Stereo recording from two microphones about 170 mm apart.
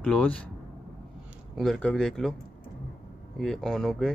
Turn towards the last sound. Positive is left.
turn(degrees=0)  # may be behind; listen again after turning